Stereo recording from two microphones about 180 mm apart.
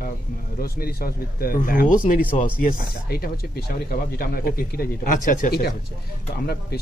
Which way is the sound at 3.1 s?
60° left (ahead or behind).